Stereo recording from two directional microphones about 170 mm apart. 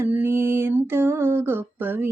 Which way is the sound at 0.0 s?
15° right (ahead or behind).